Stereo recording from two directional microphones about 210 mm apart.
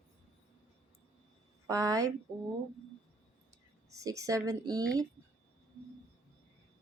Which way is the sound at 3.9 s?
15° right (ahead or behind).